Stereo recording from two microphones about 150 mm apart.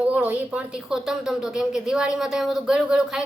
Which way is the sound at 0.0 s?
10° right (ahead or behind).